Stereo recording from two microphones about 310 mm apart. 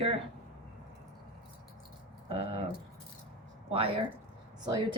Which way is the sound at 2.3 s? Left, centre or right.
Centre.